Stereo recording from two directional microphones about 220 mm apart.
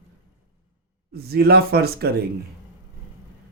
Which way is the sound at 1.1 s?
45° right (ahead or behind).